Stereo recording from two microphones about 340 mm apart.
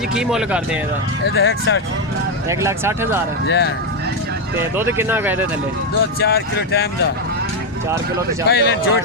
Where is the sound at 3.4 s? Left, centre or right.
Left.